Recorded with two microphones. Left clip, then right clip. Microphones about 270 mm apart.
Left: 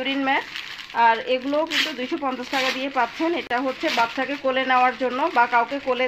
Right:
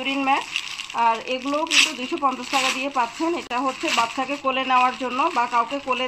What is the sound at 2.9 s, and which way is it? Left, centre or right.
Speech, left.